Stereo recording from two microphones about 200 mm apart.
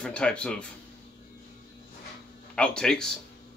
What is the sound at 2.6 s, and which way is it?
Speech, 5° left (ahead or behind).